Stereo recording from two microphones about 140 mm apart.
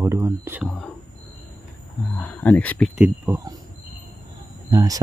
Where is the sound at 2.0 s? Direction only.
20° left (ahead or behind).